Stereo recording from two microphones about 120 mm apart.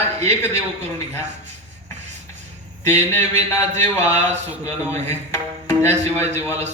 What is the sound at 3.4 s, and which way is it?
A man's voice, 70° right (ahead or behind).